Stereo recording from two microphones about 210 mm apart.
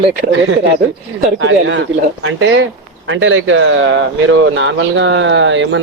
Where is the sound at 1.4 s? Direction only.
65° right (ahead or behind).